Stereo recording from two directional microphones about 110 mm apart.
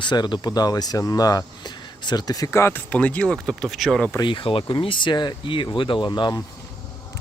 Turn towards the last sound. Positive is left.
turn(degrees=40)  # may be behind; listen again after turning